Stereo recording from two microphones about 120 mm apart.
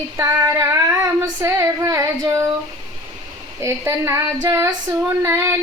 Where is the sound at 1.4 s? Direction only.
25° right (ahead or behind).